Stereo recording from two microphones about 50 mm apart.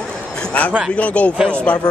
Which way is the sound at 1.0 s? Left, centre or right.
Left.